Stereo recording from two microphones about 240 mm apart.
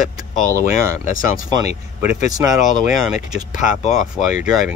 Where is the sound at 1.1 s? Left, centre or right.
Left.